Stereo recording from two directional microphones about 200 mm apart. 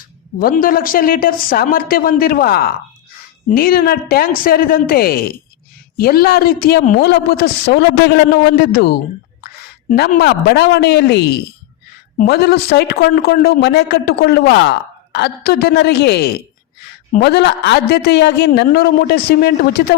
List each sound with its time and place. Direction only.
0.3 s a woman's voice: 45° left (ahead or behind)